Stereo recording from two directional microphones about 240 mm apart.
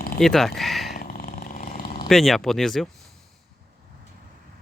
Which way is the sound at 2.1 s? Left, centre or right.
Centre.